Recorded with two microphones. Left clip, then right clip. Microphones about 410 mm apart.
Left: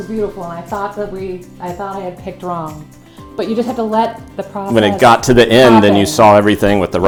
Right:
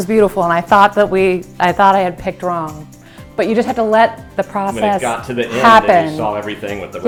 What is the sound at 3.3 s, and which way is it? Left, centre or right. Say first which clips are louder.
Speech: right 3 dB; right.